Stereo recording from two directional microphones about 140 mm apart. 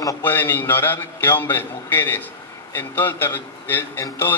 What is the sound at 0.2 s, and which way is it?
A man's voice, 15° left (ahead or behind).